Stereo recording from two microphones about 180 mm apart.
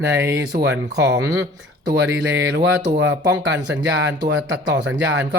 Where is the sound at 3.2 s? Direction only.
90° right.